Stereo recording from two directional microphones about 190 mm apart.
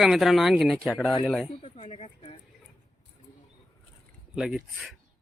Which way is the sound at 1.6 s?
30° left (ahead or behind).